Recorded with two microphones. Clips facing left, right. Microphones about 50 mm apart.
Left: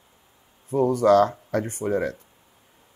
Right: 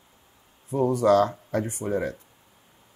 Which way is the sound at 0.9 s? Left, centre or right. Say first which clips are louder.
Left 2 dB; left.